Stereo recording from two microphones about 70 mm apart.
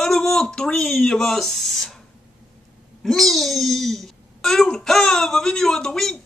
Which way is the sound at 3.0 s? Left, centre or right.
Centre.